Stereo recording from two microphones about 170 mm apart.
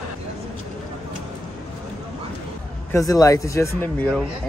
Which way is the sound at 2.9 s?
20° left (ahead or behind).